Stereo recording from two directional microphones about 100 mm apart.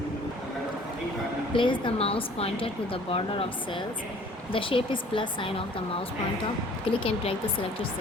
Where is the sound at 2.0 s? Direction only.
75° left (ahead or behind).